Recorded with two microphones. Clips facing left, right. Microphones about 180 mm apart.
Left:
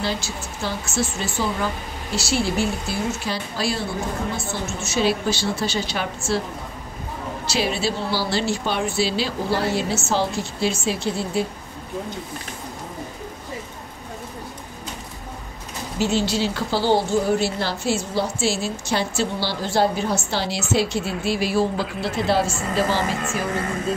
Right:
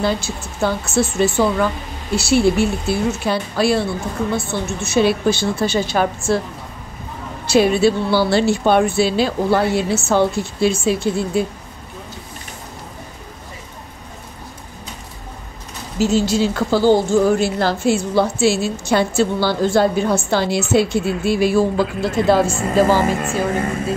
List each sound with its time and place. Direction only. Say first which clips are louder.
0.0 s speech: right 6 dB; 55° right (ahead or behind)
4.8 s a woman's voice: right 6 dB; 60° right (ahead or behind)
7.4 s speech: right 10 dB; 55° right (ahead or behind)
16.0 s a woman's voice: right 5 dB; 45° right (ahead or behind)
21.0 s a woman's voice: right 6 dB; centre (ahead or behind)
21.3 s a woman's voice: right 5 dB; 50° right (ahead or behind)